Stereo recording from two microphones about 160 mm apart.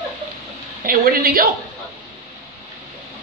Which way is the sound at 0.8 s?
65° right (ahead or behind).